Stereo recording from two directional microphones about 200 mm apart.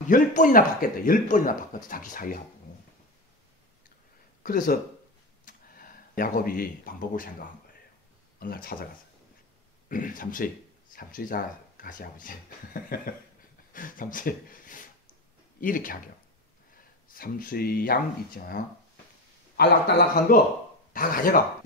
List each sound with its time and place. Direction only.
0.1 s speech: 40° left (ahead or behind)
4.4 s speech: 45° left (ahead or behind)
5.4 s a sound: 45° left (ahead or behind)
8.4 s speech: 45° left (ahead or behind)
9.8 s speech: 40° left (ahead or behind)
17.1 s speech: 45° left (ahead or behind)